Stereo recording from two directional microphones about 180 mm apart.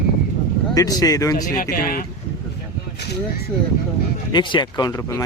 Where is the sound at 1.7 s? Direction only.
55° left (ahead or behind).